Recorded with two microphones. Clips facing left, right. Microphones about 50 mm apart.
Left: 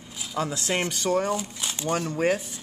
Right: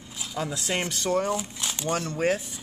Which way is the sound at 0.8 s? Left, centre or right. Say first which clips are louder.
Left 1 dB; centre.